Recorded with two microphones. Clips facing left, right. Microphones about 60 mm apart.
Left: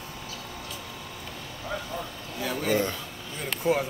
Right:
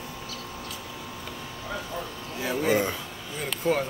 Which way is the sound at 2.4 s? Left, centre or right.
Right.